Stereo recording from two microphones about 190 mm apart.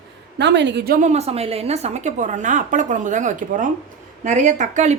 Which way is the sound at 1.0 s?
35° right (ahead or behind).